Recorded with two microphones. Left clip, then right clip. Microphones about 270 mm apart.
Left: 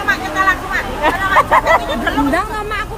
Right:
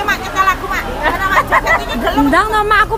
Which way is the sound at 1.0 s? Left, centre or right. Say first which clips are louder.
Left 1 dB; left.